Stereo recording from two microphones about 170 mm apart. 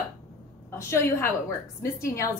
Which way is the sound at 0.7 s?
15° left (ahead or behind).